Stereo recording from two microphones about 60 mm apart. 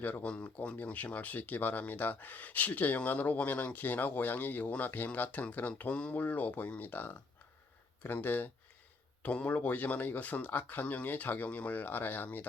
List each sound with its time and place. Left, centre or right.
0.0 s speech: left